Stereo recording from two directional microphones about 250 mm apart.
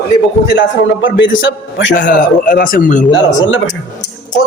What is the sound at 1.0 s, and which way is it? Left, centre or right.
Speech, left.